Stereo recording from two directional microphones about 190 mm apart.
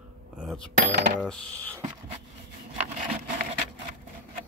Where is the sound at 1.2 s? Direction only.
5° left (ahead or behind).